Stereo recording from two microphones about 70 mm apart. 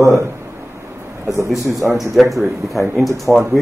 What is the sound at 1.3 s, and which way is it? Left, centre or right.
Speech, right.